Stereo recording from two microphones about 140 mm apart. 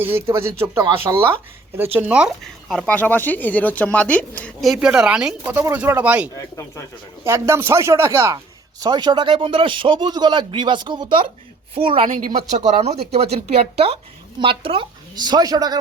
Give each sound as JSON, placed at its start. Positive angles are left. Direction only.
{"t": 0.0, "sound": "speech", "side_deg": -15}
{"t": 2.4, "sound": "speech", "side_deg": 0}
{"t": 4.7, "sound": "a woman's voice", "side_deg": -5}
{"t": 6.3, "sound": "speech", "side_deg": 20}
{"t": 7.3, "sound": "speech", "side_deg": -20}
{"t": 8.8, "sound": "a woman's voice", "side_deg": -30}
{"t": 12.1, "sound": "speech", "side_deg": -85}
{"t": 12.5, "sound": "a woman's voice", "side_deg": -55}